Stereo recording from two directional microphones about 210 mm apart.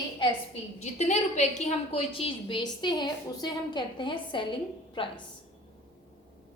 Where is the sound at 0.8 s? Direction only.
35° left (ahead or behind).